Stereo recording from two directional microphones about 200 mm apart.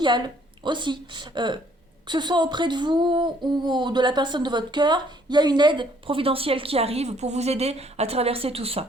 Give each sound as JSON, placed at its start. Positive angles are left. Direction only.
{"t": 0.6, "sound": "a woman's voice", "side_deg": -25}